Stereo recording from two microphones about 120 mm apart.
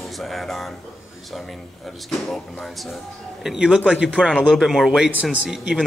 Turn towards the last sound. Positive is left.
turn(degrees=-5)  # may be behind; listen again after turning